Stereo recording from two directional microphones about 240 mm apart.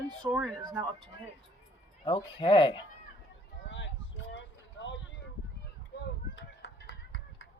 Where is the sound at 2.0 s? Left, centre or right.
Left.